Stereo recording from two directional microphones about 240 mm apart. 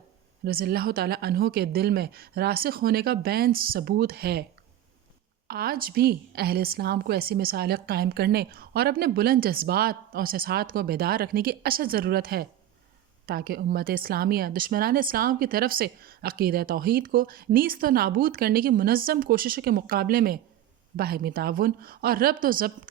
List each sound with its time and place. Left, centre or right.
0.4 s speech: right
5.5 s speech: right